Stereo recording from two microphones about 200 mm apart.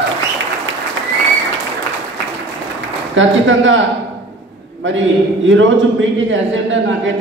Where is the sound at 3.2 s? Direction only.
70° right (ahead or behind).